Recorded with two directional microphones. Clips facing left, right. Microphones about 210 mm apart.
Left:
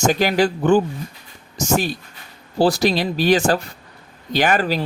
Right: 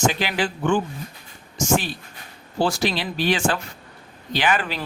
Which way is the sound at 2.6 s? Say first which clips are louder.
Left 6 dB; 35° left (ahead or behind).